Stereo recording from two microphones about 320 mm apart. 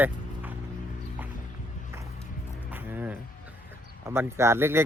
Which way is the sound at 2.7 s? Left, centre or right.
Centre.